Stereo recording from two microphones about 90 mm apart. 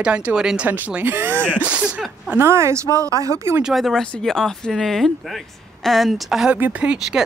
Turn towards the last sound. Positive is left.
turn(degrees=-15)  # may be behind; listen again after turning